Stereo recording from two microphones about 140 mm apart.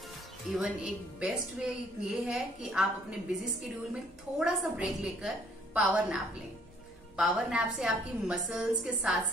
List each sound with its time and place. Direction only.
0.5 s a woman's voice: 5° right (ahead or behind)
4.4 s a woman's voice: 5° right (ahead or behind)